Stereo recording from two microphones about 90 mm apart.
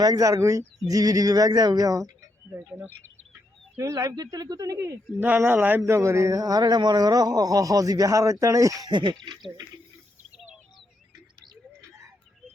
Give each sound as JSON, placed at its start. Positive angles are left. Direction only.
{"t": 0.0, "sound": "speech", "side_deg": -45}
{"t": 2.5, "sound": "a man's voice", "side_deg": -30}
{"t": 3.8, "sound": "speech", "side_deg": -35}
{"t": 5.2, "sound": "a man's voice", "side_deg": -20}
{"t": 5.8, "sound": "speech", "side_deg": -35}
{"t": 8.9, "sound": "speech", "side_deg": -60}